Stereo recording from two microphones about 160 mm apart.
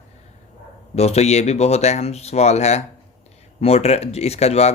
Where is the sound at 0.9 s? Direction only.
40° left (ahead or behind).